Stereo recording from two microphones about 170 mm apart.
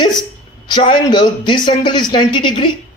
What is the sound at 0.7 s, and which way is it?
Speech, 30° left (ahead or behind).